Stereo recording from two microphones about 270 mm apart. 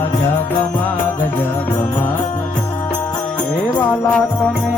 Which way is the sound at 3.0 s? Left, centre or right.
Centre.